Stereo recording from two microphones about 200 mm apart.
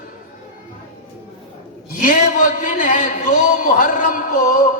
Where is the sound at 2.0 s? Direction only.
40° left (ahead or behind).